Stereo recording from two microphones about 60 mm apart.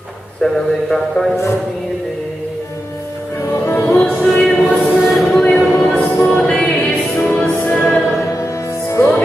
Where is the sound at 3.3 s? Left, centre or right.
Left.